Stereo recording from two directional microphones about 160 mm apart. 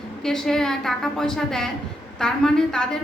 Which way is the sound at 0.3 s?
5° left (ahead or behind).